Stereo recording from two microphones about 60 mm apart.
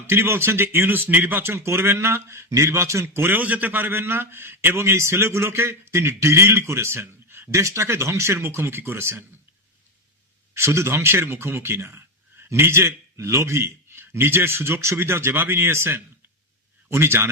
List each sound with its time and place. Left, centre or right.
0.1 s a man's voice: right
10.5 s a man's voice: right